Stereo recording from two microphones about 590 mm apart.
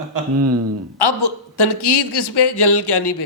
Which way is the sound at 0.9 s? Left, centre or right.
Left.